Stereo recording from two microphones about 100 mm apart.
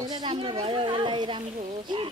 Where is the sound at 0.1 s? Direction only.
50° right (ahead or behind).